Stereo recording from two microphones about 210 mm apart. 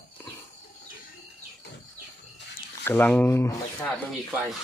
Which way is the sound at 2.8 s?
10° left (ahead or behind).